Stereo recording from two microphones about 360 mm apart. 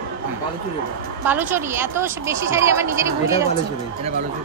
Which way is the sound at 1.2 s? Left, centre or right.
Centre.